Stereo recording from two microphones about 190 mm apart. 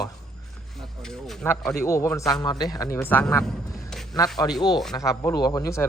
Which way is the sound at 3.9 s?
Centre (ahead or behind).